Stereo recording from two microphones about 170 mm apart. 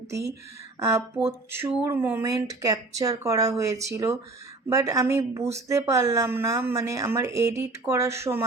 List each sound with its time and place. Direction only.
0.1 s speech: 15° right (ahead or behind)